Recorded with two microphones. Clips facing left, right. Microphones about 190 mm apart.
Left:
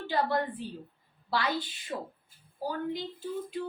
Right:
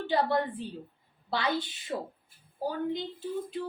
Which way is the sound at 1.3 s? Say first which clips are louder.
Right 1 dB; 20° right (ahead or behind).